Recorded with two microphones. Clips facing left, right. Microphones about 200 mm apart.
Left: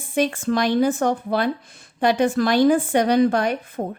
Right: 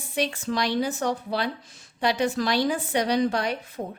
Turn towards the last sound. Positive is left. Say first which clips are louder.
# left 6 dB
turn(degrees=50)  # may be behind; listen again after turning